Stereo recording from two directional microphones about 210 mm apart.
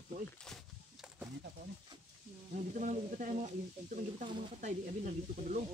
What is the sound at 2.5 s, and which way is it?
Speech, 35° right (ahead or behind).